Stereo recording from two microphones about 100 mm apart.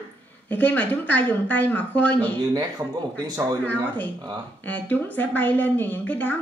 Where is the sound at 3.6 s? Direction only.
15° left (ahead or behind).